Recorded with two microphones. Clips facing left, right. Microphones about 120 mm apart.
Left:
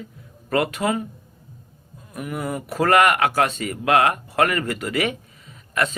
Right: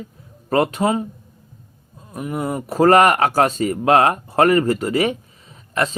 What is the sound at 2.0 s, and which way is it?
Speech, 30° right (ahead or behind).